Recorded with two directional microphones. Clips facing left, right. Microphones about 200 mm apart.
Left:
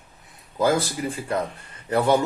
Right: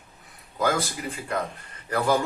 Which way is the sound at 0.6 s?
30° left (ahead or behind).